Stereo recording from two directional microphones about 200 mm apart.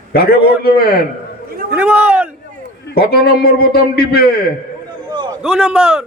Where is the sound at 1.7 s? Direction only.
5° right (ahead or behind).